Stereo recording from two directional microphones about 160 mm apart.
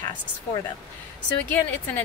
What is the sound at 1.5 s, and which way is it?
Speech, 10° left (ahead or behind).